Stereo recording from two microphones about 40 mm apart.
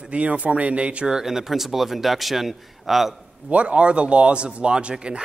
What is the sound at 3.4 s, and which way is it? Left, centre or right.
A man's voice, right.